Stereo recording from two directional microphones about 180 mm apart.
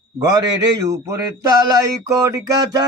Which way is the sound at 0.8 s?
20° right (ahead or behind).